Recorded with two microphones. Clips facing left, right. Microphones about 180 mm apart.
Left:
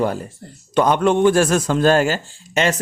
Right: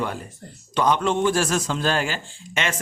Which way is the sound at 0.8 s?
50° left (ahead or behind).